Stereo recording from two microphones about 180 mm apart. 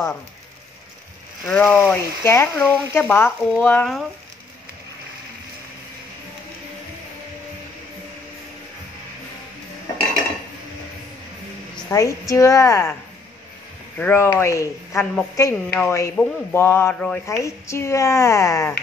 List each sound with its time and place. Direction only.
1.4 s a woman's voice: 5° left (ahead or behind)
11.9 s a woman's voice: 20° left (ahead or behind)
13.9 s a woman's voice: 10° left (ahead or behind)